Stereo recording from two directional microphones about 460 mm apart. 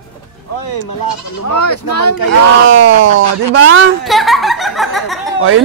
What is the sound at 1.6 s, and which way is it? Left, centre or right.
Speech, left.